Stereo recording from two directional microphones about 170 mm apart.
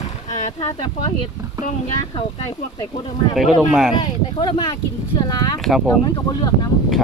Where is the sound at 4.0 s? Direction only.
25° left (ahead or behind).